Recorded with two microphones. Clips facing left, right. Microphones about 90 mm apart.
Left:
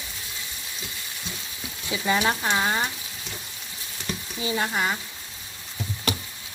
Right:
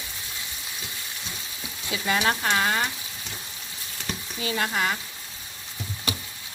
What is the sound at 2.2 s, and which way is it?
Speech, 10° left (ahead or behind).